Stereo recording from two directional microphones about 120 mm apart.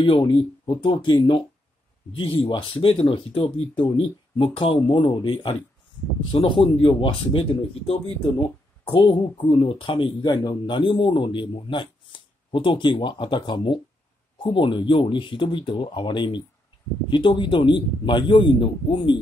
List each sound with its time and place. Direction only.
0.2 s speech: 40° left (ahead or behind)